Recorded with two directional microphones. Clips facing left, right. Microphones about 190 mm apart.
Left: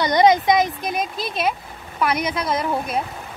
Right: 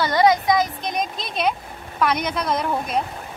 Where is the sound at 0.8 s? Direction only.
5° left (ahead or behind).